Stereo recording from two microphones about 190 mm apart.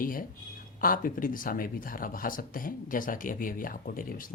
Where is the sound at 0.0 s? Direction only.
45° left (ahead or behind).